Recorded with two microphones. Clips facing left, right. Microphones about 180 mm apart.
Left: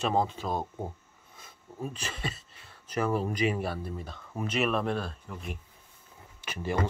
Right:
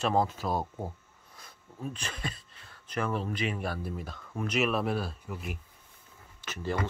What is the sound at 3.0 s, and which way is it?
Speech, 30° left (ahead or behind).